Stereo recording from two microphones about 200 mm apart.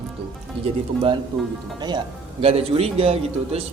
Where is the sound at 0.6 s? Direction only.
30° right (ahead or behind).